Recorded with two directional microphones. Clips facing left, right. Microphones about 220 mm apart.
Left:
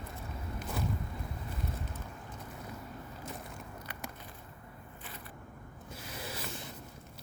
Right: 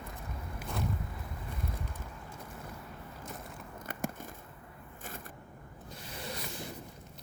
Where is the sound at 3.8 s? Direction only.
50° right (ahead or behind).